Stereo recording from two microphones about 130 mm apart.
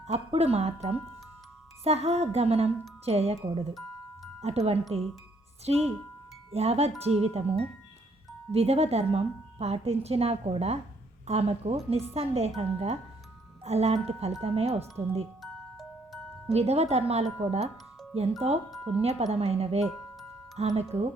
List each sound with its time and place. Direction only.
0.0 s a woman's voice: 55° right (ahead or behind)
4.4 s speech: 55° right (ahead or behind)
4.9 s speech: centre (ahead or behind)
5.6 s a woman's voice: 55° right (ahead or behind)
15.4 s music: centre (ahead or behind)
16.5 s a woman's voice: 55° right (ahead or behind)
18.7 s speech: centre (ahead or behind)
19.0 s a woman's voice: 55° right (ahead or behind)